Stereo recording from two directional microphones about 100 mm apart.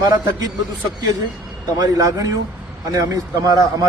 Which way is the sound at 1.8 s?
40° right (ahead or behind).